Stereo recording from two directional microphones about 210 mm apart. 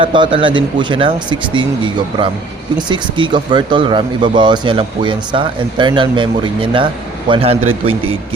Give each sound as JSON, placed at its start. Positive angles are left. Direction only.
{"t": 0.0, "sound": "speech", "side_deg": -25}